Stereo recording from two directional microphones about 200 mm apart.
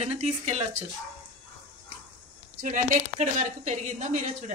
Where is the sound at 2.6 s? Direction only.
40° right (ahead or behind).